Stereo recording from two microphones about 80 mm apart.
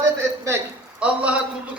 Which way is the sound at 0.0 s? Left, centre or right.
Right.